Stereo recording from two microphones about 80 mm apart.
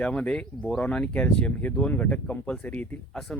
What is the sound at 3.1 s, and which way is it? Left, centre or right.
Speech, centre.